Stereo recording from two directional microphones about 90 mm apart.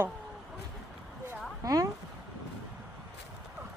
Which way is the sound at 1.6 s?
40° right (ahead or behind).